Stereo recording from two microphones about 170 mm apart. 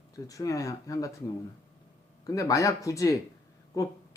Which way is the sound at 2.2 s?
20° left (ahead or behind).